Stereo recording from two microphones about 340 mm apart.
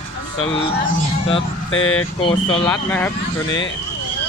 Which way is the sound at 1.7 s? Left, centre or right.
Left.